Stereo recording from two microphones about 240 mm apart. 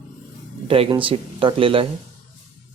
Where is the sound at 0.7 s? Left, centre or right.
Right.